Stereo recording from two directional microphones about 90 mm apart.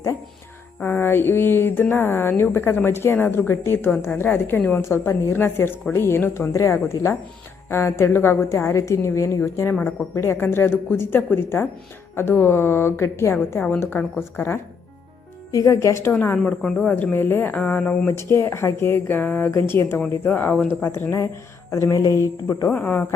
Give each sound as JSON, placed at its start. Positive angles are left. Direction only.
{"t": 0.8, "sound": "speech", "side_deg": 25}
{"t": 6.5, "sound": "a woman's voice", "side_deg": 35}
{"t": 15.5, "sound": "a woman's voice", "side_deg": 40}
{"t": 16.4, "sound": "speech", "side_deg": 5}
{"t": 16.8, "sound": "speech", "side_deg": 20}
{"t": 17.6, "sound": "speech", "side_deg": 15}
{"t": 18.2, "sound": "speech", "side_deg": 30}
{"t": 20.8, "sound": "a woman's voice", "side_deg": 25}
{"t": 22.7, "sound": "speech", "side_deg": 20}